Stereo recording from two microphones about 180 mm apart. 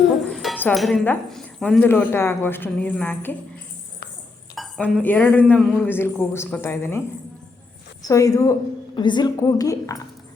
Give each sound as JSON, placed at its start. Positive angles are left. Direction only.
{"t": 0.0, "sound": "music", "side_deg": 0}
{"t": 0.6, "sound": "speech", "side_deg": 0}
{"t": 4.5, "sound": "speech", "side_deg": 0}
{"t": 8.0, "sound": "a woman's voice", "side_deg": 20}